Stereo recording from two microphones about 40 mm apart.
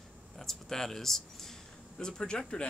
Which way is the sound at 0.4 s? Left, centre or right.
Centre.